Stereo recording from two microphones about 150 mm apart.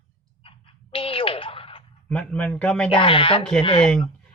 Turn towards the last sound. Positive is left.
turn(degrees=35)  # may be behind; listen again after turning